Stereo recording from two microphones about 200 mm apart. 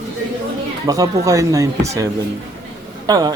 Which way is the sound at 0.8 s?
15° right (ahead or behind).